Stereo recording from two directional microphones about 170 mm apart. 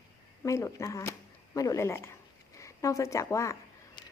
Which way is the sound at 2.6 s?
20° left (ahead or behind).